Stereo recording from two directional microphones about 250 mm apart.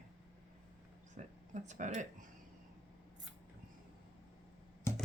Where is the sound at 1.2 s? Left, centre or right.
Right.